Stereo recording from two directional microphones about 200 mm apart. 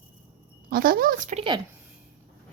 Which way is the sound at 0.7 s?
45° right (ahead or behind).